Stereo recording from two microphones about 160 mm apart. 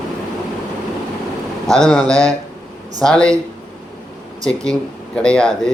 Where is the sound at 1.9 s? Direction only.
5° left (ahead or behind).